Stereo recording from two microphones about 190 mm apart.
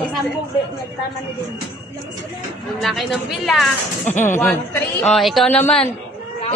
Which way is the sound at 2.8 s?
Centre (ahead or behind).